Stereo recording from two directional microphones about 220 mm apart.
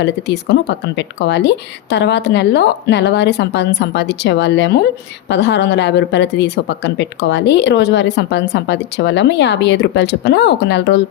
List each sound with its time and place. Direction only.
0.0 s speech: 50° left (ahead or behind)